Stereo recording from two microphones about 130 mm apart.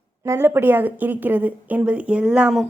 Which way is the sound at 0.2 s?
20° right (ahead or behind).